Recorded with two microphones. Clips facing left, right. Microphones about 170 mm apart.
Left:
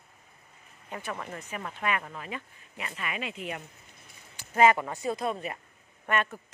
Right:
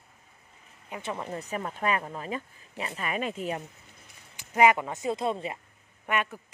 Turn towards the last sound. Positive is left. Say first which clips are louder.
# left 1 dB
turn(degrees=-10)  # may be behind; listen again after turning